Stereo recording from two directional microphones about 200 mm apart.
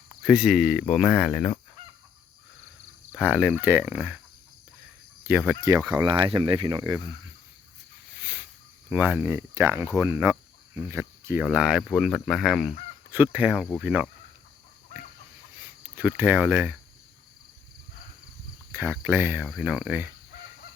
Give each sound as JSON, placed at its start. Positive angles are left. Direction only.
{"t": 0.3, "sound": "speech", "side_deg": -5}
{"t": 1.3, "sound": "fowl", "side_deg": 10}
{"t": 3.2, "sound": "speech", "side_deg": -5}
{"t": 5.3, "sound": "speech", "side_deg": -10}
{"t": 8.9, "sound": "speech", "side_deg": -10}
{"t": 11.4, "sound": "speech", "side_deg": -5}
{"t": 16.0, "sound": "speech", "side_deg": -10}
{"t": 18.7, "sound": "speech", "side_deg": -10}